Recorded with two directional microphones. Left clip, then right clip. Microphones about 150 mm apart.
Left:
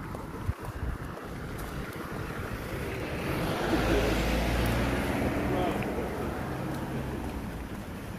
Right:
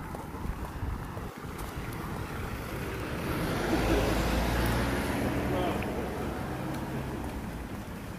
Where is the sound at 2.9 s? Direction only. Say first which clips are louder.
Left 1 dB; 90° right; by 5.7 s 35° right (ahead or behind).